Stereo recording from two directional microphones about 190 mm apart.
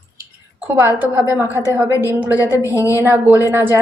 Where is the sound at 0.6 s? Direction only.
10° right (ahead or behind).